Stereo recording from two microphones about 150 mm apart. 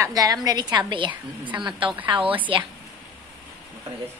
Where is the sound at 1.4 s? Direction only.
10° right (ahead or behind).